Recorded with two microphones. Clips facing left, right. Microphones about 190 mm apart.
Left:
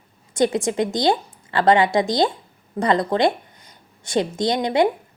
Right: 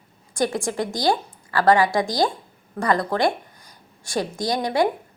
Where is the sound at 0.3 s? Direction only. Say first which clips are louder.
Left 4 dB; 20° left (ahead or behind).